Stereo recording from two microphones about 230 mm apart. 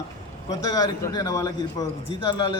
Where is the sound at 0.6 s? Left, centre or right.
Centre.